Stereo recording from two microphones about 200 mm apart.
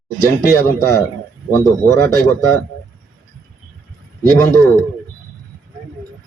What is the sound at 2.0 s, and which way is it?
Speech, 5° left (ahead or behind).